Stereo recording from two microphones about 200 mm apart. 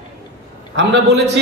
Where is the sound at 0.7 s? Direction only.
60° right (ahead or behind).